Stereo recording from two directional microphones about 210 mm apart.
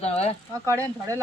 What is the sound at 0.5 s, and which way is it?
Speech, 15° right (ahead or behind).